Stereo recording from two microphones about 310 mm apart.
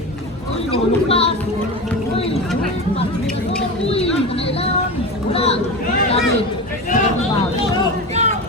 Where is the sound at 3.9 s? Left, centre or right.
Centre.